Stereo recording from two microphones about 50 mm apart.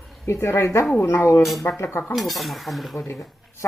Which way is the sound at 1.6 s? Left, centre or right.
Left.